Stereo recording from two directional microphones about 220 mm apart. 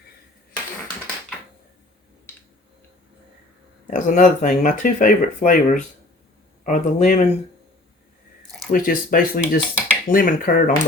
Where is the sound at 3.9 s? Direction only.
35° left (ahead or behind).